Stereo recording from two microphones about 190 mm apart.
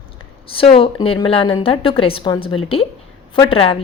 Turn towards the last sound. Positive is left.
turn(degrees=30)  # may be behind; listen again after turning